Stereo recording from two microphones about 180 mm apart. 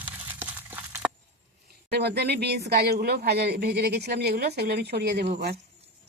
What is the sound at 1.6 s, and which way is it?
Speech, 65° right (ahead or behind).